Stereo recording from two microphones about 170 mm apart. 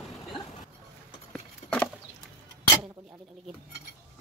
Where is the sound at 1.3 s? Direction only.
5° left (ahead or behind).